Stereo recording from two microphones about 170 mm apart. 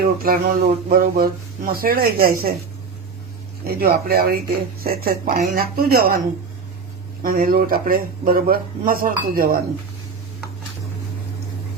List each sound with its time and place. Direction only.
0.0 s speech: 60° right (ahead or behind)
3.7 s speech: 60° right (ahead or behind)
7.2 s speech: 55° right (ahead or behind)